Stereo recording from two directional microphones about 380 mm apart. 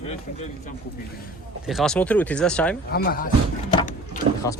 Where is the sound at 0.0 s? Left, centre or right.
Centre.